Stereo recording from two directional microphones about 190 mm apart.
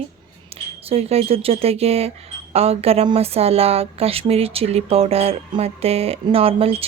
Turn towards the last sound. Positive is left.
turn(degrees=-30)  # may be behind; listen again after turning